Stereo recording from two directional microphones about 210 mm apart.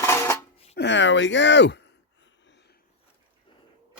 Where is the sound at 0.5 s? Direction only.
30° left (ahead or behind).